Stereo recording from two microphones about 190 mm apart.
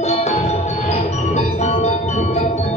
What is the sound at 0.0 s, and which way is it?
Music, 35° left (ahead or behind).